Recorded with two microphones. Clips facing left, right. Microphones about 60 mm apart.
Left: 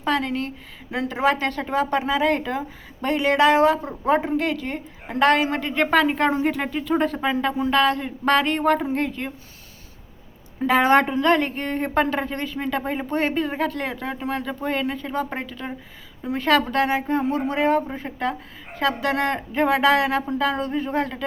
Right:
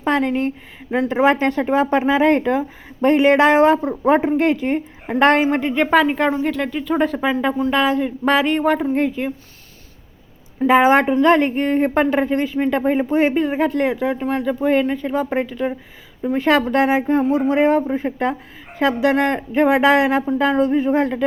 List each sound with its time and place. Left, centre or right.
0.0 s a woman's voice: right
5.7 s speech: centre
10.7 s a woman's voice: centre